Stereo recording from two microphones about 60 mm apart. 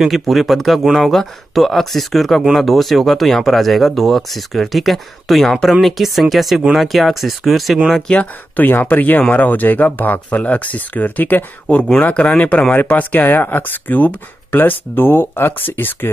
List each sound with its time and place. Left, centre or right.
0.0 s speech: centre
8.1 s speech: left